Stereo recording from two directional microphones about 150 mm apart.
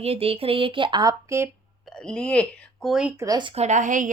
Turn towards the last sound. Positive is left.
turn(degrees=-60)  # may be behind; listen again after turning